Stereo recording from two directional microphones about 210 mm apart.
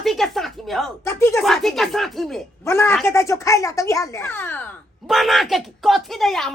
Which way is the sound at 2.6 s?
10° left (ahead or behind).